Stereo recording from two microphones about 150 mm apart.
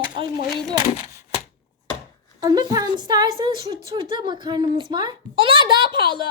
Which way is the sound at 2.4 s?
25° right (ahead or behind).